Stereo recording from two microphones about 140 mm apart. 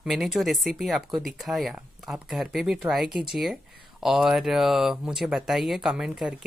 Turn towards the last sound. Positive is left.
turn(degrees=-5)  # may be behind; listen again after turning